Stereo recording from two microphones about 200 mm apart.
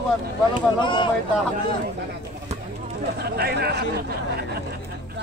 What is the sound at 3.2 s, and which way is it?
Speech, 50° right (ahead or behind).